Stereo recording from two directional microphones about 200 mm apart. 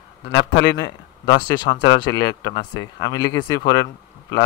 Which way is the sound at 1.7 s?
65° left (ahead or behind).